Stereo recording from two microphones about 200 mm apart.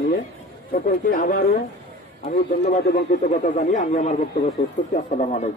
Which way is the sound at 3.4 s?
35° left (ahead or behind).